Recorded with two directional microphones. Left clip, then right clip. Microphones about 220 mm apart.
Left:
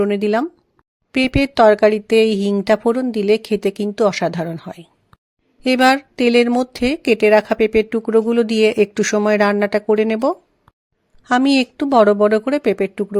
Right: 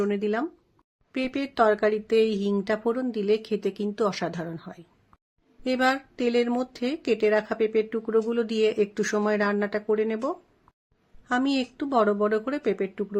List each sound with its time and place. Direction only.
0.0 s speech: 35° left (ahead or behind)